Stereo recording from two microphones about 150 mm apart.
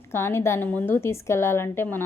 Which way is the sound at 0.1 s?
15° left (ahead or behind).